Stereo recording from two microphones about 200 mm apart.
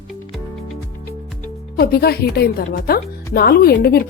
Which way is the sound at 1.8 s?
50° left (ahead or behind).